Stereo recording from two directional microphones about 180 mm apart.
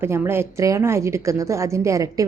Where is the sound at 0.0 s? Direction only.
15° right (ahead or behind).